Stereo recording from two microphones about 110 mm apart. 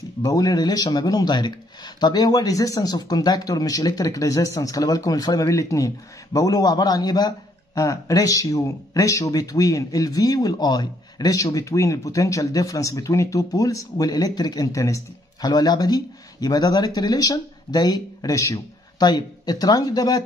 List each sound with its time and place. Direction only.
0.2 s a man's voice: 35° left (ahead or behind)